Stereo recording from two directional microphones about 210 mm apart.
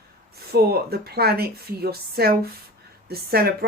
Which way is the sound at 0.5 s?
50° right (ahead or behind).